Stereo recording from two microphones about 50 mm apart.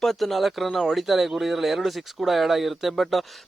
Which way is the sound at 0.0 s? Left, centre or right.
Centre.